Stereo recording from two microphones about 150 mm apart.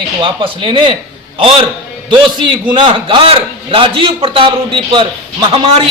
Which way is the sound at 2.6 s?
35° right (ahead or behind).